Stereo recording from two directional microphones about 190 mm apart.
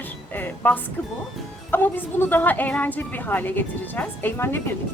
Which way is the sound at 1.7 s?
10° left (ahead or behind).